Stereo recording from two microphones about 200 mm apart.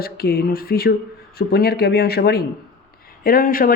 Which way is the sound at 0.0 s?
50° left (ahead or behind).